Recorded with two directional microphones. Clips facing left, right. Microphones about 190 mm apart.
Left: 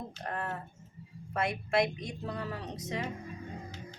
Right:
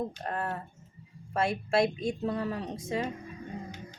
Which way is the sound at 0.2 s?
30° right (ahead or behind).